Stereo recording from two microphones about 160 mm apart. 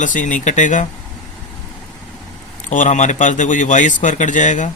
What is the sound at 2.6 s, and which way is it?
Speech, 50° left (ahead or behind).